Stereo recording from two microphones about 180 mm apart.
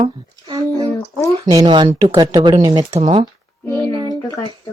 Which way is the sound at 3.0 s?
30° right (ahead or behind).